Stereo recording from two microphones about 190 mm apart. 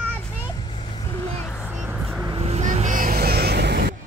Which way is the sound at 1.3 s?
10° left (ahead or behind).